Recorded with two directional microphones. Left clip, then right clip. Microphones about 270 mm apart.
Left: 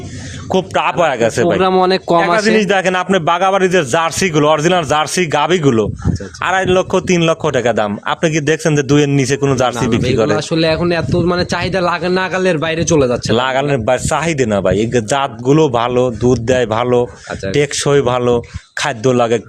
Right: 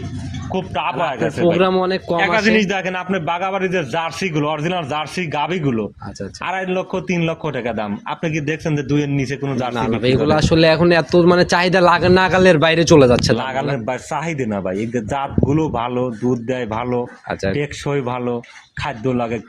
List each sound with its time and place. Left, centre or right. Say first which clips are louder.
0.5 s a man's voice: left 7 dB; left
1.7 s a man's voice: left 7 dB; left
2.6 s a man's voice: left 8 dB; left
9.7 s a man's voice: left 3 dB; centre
13.3 s a man's voice: left 6 dB; left